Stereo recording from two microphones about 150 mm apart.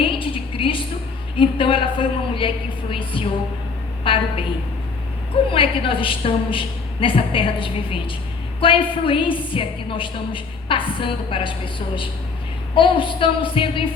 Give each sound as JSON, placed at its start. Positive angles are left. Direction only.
{"t": 0.0, "sound": "a sound", "side_deg": 35}
{"t": 1.4, "sound": "a woman's voice", "side_deg": 35}
{"t": 5.5, "sound": "a woman's voice", "side_deg": 35}